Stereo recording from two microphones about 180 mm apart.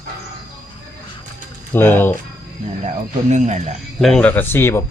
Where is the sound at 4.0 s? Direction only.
5° left (ahead or behind).